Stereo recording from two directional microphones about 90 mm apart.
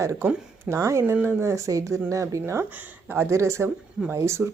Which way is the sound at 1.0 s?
25° right (ahead or behind).